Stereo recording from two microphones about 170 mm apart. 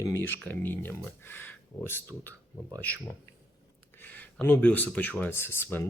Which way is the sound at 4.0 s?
10° left (ahead or behind).